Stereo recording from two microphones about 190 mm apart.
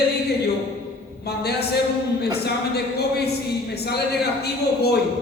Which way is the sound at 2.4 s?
55° left (ahead or behind).